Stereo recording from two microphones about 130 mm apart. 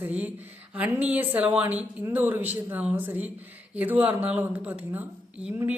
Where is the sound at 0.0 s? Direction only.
10° right (ahead or behind).